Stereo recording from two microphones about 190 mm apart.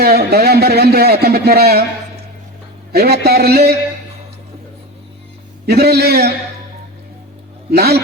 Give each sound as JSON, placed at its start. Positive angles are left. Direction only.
{"t": 0.0, "sound": "speech", "side_deg": -55}
{"t": 2.9, "sound": "speech", "side_deg": -55}
{"t": 5.6, "sound": "speech", "side_deg": -55}
{"t": 7.8, "sound": "speech", "side_deg": -55}